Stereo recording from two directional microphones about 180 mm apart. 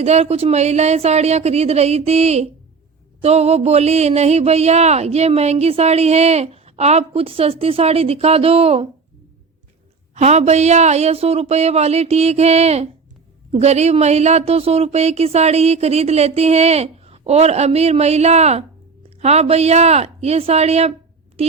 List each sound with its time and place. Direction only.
0.0 s speech: 35° right (ahead or behind)
10.2 s speech: 40° right (ahead or behind)